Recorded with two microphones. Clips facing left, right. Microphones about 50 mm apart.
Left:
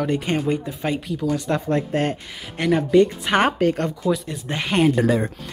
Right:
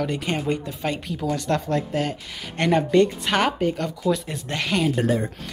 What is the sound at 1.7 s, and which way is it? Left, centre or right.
Speech, left.